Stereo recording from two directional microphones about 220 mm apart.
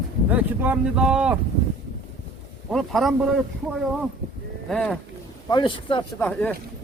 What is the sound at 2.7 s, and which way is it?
Speech, centre (ahead or behind).